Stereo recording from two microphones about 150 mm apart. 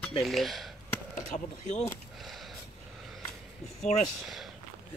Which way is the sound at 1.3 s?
50° left (ahead or behind).